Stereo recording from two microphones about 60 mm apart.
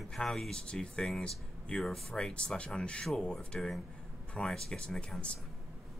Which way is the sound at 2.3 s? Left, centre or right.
Centre.